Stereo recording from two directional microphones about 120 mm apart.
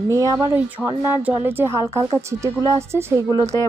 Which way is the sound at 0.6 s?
15° right (ahead or behind).